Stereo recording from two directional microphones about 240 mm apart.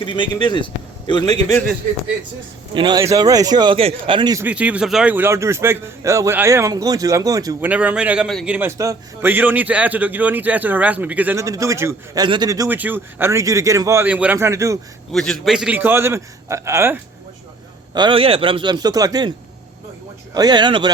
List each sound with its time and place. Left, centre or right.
0.0 s a man's voice: centre
2.7 s a man's voice: centre
15.1 s a man's voice: centre
20.3 s a man's voice: centre